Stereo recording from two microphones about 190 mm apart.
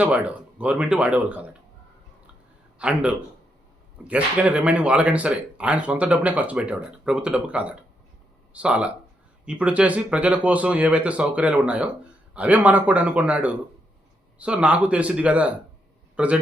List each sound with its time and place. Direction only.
0.6 s speech: 5° right (ahead or behind)
2.7 s a man's voice: 5° right (ahead or behind)